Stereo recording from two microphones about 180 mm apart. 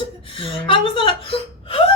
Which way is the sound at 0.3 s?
30° left (ahead or behind).